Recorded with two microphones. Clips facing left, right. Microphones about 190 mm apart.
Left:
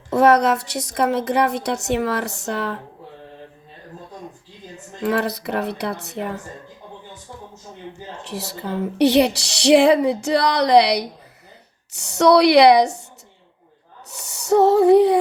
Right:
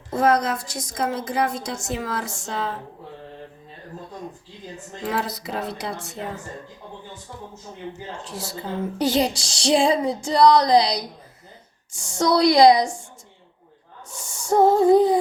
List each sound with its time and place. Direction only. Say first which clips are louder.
0.1 s a woman's voice: left 5 dB; 70° left (ahead or behind)
5.0 s speech: left 6 dB; 65° left (ahead or behind)
8.2 s a woman's voice: left 5 dB; 65° left (ahead or behind)
14.1 s a sound: left 4 dB; 70° left (ahead or behind)